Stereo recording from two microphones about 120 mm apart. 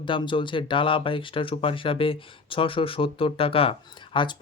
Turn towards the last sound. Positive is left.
turn(degrees=40)  # may be behind; listen again after turning